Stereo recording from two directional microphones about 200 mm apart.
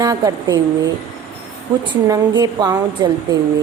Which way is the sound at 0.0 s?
20° right (ahead or behind).